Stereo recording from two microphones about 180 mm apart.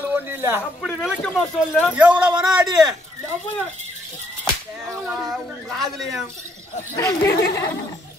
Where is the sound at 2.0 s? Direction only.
5° right (ahead or behind).